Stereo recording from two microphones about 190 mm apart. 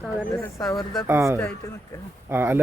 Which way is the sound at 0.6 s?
Centre (ahead or behind).